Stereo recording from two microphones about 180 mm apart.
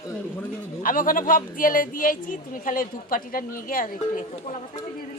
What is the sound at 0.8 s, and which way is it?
Speech, 50° left (ahead or behind).